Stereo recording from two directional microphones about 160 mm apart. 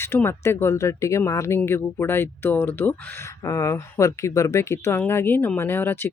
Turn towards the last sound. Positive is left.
turn(degrees=15)  # may be behind; listen again after turning